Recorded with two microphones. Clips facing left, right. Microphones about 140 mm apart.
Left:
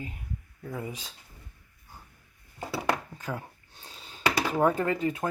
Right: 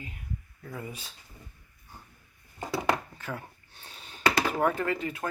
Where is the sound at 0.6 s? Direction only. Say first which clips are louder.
Left 5 dB; 20° left (ahead or behind).